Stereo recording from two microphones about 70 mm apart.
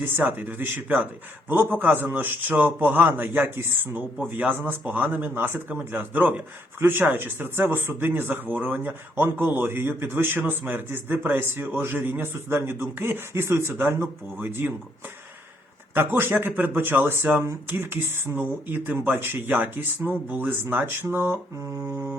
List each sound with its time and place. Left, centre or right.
0.0 s a man's voice: right
16.0 s a man's voice: right